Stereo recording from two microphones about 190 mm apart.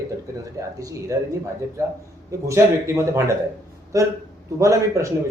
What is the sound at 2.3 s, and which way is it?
A man's voice, 15° right (ahead or behind).